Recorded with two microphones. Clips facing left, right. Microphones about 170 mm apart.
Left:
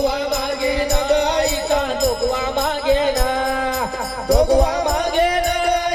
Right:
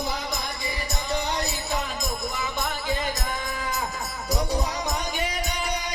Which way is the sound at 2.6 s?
75° left (ahead or behind).